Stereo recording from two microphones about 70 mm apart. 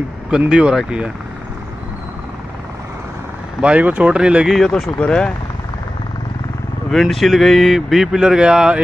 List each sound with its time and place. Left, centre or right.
0.5 s speech: centre
3.6 s speech: right
4.5 s speech: centre
4.9 s speech: centre
6.9 s speech: centre